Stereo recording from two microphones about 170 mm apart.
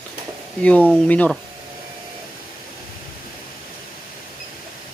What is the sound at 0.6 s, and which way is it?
Speech, 5° left (ahead or behind).